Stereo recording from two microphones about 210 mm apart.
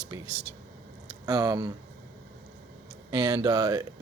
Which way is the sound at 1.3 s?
15° right (ahead or behind).